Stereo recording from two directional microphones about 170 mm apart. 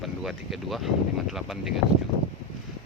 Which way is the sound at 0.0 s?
Centre (ahead or behind).